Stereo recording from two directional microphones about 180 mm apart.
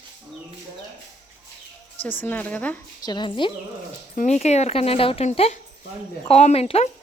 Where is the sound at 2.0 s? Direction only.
10° left (ahead or behind).